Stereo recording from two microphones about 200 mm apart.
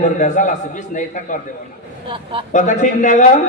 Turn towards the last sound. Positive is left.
turn(degrees=40)  # may be behind; listen again after turning